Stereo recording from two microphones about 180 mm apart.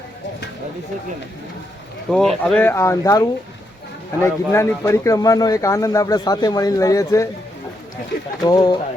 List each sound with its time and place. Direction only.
2.0 s speech: 5° left (ahead or behind)
8.4 s speech: 20° left (ahead or behind)